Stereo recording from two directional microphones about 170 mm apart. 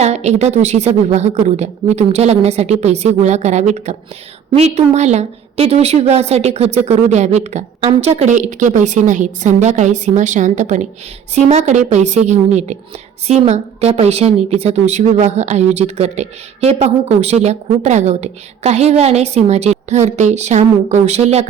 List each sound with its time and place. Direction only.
0.0 s a woman's voice: 40° right (ahead or behind)